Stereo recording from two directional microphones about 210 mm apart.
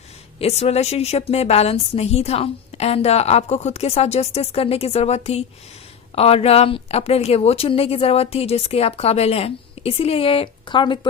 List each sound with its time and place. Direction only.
0.3 s a woman's voice: 30° left (ahead or behind)